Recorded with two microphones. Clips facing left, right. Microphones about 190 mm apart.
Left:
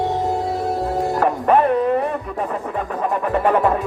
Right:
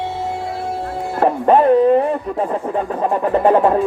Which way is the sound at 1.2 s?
30° right (ahead or behind).